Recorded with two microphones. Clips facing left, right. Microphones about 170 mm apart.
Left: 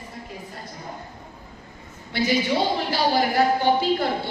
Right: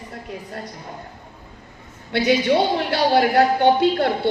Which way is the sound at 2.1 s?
70° right (ahead or behind).